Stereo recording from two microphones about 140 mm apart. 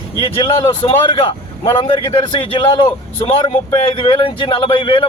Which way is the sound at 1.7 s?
40° left (ahead or behind).